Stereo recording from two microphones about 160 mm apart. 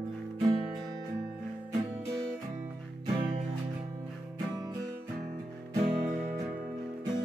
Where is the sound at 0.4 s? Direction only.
30° right (ahead or behind).